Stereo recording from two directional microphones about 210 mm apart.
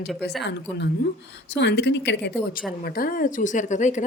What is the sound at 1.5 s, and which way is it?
A woman's voice, 55° left (ahead or behind).